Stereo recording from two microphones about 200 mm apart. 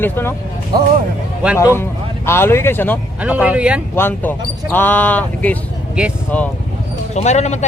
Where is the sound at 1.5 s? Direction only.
15° left (ahead or behind).